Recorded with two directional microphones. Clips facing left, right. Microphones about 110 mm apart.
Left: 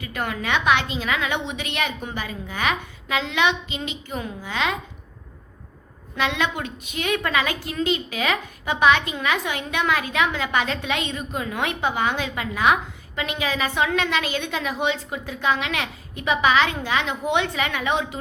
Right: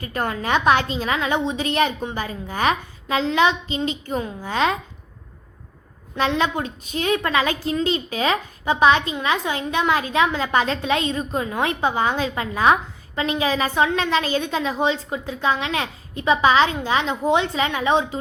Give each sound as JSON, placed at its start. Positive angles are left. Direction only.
{"t": 0.0, "sound": "a woman's voice", "side_deg": -40}
{"t": 6.1, "sound": "a woman's voice", "side_deg": -35}